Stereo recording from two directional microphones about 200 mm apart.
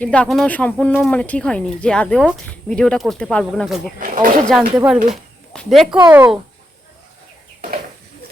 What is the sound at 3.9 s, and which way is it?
Speech, 40° right (ahead or behind).